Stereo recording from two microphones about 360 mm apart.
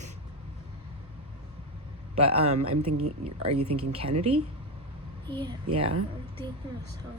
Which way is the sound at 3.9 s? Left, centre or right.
Centre.